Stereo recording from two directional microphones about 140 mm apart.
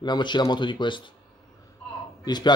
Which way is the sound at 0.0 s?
30° left (ahead or behind).